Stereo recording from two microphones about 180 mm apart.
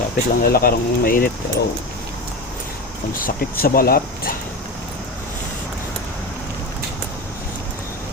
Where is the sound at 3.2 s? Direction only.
55° left (ahead or behind).